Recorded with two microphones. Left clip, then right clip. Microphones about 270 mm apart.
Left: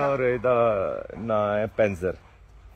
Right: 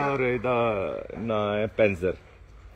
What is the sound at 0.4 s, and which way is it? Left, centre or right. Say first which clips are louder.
Speech: left 4 dB; left.